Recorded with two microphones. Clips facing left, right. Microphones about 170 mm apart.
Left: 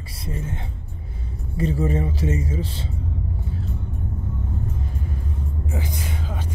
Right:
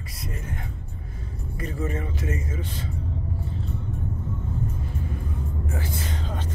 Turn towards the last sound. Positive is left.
turn(degrees=10)  # may be behind; listen again after turning